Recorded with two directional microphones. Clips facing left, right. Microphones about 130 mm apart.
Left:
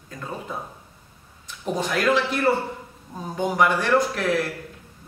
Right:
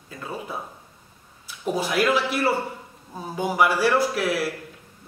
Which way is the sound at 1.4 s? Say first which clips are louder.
Right 1 dB; 10° right (ahead or behind).